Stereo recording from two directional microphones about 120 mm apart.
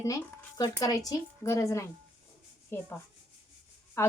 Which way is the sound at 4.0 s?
20° left (ahead or behind).